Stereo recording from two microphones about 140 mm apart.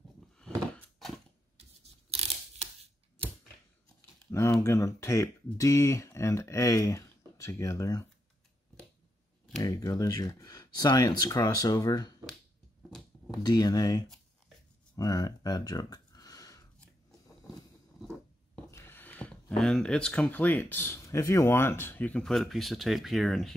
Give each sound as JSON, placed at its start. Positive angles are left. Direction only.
{"t": 0.4, "sound": "door", "side_deg": 5}
{"t": 1.6, "sound": "a sound", "side_deg": -45}
{"t": 4.3, "sound": "speech", "side_deg": 20}
{"t": 9.6, "sound": "speech", "side_deg": 25}
{"t": 13.3, "sound": "speech", "side_deg": 25}
{"t": 15.0, "sound": "a sound", "side_deg": 25}
{"t": 18.7, "sound": "speech", "side_deg": 20}